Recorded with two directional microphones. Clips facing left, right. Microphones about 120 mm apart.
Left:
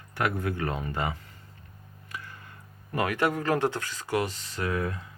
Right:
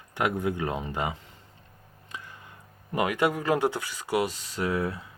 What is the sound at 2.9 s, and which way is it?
Speech, 15° right (ahead or behind).